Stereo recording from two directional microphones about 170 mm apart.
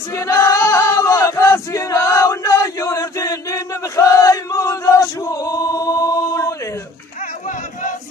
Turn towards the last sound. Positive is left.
turn(degrees=50)  # may be behind; listen again after turning